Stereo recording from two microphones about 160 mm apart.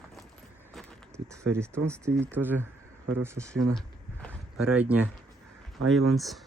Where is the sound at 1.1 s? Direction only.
15° right (ahead or behind).